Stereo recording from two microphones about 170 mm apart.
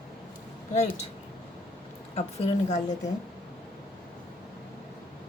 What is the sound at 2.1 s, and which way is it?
Speech, 40° left (ahead or behind).